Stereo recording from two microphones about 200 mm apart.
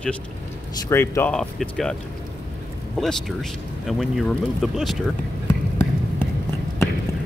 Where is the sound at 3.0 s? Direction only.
Centre (ahead or behind).